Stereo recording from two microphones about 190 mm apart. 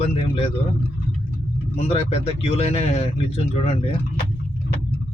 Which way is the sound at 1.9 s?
30° left (ahead or behind).